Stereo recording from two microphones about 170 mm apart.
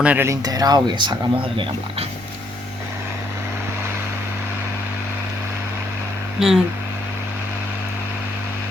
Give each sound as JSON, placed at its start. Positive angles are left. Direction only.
{"t": 0.0, "sound": "speech", "side_deg": -10}
{"t": 6.4, "sound": "speech", "side_deg": 0}